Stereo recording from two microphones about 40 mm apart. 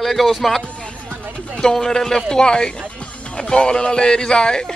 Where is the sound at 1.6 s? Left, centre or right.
Centre.